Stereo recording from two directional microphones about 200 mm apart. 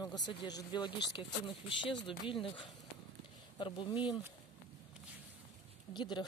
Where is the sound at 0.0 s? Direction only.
20° left (ahead or behind).